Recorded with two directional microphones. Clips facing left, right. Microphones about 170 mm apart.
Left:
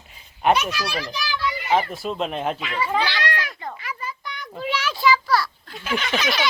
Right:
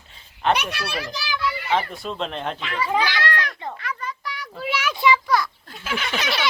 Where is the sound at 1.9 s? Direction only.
5° left (ahead or behind).